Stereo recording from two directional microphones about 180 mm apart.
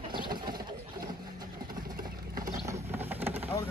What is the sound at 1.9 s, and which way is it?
Patter, 50° right (ahead or behind).